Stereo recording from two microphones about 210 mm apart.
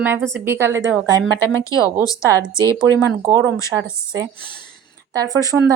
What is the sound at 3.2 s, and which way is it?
Speech, 15° right (ahead or behind).